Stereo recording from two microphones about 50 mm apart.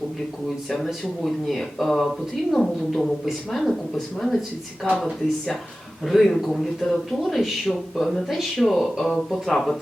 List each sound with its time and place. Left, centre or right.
0.7 s speech: centre
6.1 s speech: centre